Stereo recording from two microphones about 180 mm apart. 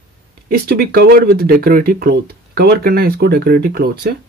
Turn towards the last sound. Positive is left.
turn(degrees=-60)  # may be behind; listen again after turning